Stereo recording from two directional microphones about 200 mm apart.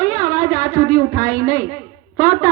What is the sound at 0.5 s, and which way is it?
A woman's voice, 40° left (ahead or behind).